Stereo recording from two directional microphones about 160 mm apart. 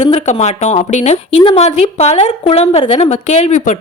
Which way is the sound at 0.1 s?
40° left (ahead or behind).